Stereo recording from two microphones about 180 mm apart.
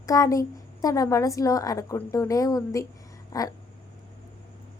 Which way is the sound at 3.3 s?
20° left (ahead or behind).